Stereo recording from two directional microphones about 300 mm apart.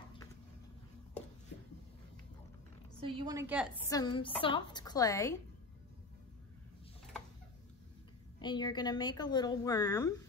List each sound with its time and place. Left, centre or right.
3.0 s a woman's voice: centre
3.9 s a woman's voice: centre
8.4 s a woman's voice: centre